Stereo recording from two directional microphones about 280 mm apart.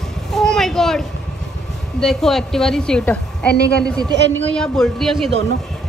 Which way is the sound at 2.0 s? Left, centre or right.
Centre.